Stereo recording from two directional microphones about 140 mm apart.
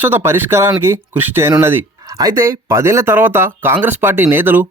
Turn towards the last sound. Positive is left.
turn(degrees=-15)  # may be behind; listen again after turning